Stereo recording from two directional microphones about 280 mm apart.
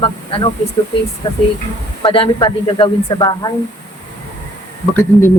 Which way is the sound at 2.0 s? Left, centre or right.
Centre.